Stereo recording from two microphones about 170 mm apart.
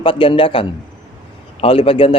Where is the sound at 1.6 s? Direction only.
35° left (ahead or behind).